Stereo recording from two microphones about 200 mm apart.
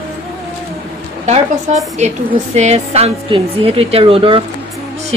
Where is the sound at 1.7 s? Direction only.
35° right (ahead or behind).